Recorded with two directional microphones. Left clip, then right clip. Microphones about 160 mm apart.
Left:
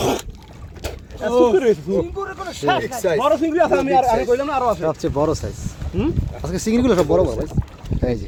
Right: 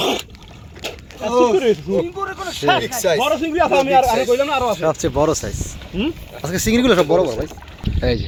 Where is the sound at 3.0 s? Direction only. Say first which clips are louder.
Right 1 dB; 20° left (ahead or behind).